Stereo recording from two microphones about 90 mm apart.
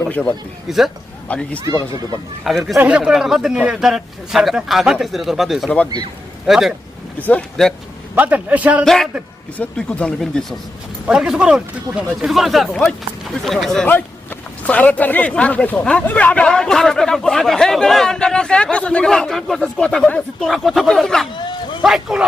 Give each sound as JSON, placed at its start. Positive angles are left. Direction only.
{"t": 0.0, "sound": "speech", "side_deg": 15}
{"t": 0.7, "sound": "speech", "side_deg": 0}
{"t": 1.3, "sound": "speech", "side_deg": 15}
{"t": 2.4, "sound": "speech", "side_deg": 0}
{"t": 2.7, "sound": "speech", "side_deg": -20}
{"t": 3.0, "sound": "speech", "side_deg": -5}
{"t": 7.2, "sound": "speech", "side_deg": 15}
{"t": 8.1, "sound": "a man's voice", "side_deg": -15}
{"t": 8.8, "sound": "speech", "side_deg": 5}
{"t": 11.0, "sound": "speech", "side_deg": -10}
{"t": 13.8, "sound": "speech", "side_deg": 20}
{"t": 21.8, "sound": "speech", "side_deg": -5}